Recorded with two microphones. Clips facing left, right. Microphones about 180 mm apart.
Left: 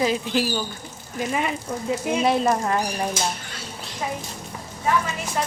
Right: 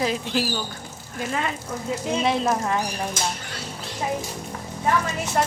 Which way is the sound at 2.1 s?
5° left (ahead or behind).